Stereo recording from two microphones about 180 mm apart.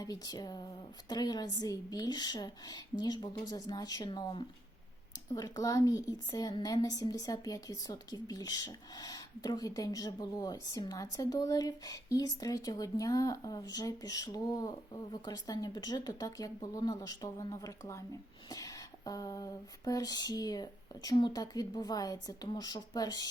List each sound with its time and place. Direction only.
0.0 s a woman's voice: 20° left (ahead or behind)